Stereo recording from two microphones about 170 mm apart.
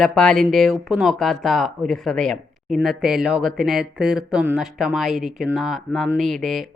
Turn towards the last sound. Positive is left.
turn(degrees=0)  # may be behind; listen again after turning